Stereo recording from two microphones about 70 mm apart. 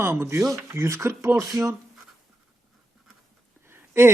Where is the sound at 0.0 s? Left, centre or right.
Right.